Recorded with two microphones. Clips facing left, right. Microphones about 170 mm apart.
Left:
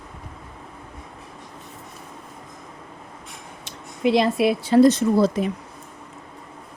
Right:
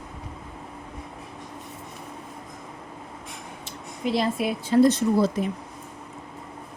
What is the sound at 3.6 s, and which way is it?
Speech, 80° left.